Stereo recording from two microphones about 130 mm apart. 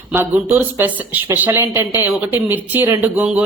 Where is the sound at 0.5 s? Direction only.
15° right (ahead or behind).